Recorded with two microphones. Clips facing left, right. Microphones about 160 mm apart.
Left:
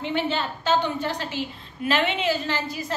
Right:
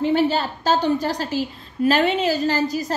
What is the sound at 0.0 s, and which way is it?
A woman's voice, 40° right (ahead or behind).